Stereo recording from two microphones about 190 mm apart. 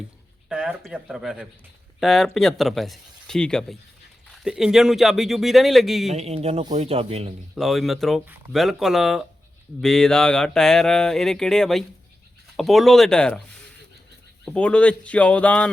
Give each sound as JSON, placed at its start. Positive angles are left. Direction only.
{"t": 0.4, "sound": "speech", "side_deg": -5}
{"t": 6.1, "sound": "speech", "side_deg": -35}
{"t": 7.5, "sound": "speech", "side_deg": 0}
{"t": 14.4, "sound": "speech", "side_deg": 5}